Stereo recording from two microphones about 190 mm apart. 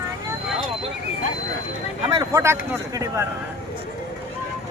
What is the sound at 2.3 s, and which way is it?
Speech, 15° right (ahead or behind).